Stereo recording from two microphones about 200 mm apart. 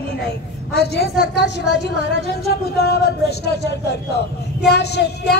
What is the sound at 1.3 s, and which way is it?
A woman's voice, 60° left (ahead or behind).